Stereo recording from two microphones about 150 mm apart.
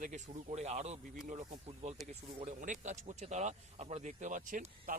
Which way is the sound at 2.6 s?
55° right (ahead or behind).